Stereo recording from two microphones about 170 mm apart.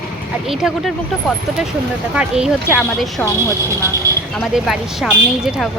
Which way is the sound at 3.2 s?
15° right (ahead or behind).